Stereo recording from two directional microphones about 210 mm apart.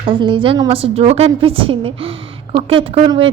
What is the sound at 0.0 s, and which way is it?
A woman's voice, 25° right (ahead or behind).